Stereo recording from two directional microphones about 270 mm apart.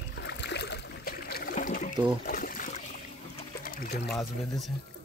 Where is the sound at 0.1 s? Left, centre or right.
Left.